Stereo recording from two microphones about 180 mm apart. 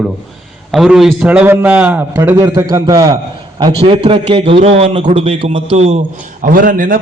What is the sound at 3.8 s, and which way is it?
A man's voice, 30° right (ahead or behind).